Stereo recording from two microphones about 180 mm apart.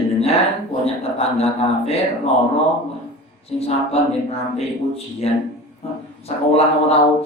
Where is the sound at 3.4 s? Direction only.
35° left (ahead or behind).